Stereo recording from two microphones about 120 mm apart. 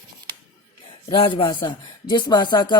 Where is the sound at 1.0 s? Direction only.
45° left (ahead or behind).